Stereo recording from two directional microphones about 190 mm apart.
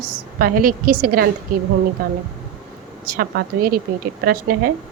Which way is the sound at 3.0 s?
50° right (ahead or behind).